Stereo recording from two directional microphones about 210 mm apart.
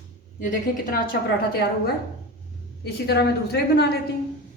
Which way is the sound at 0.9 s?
45° left (ahead or behind).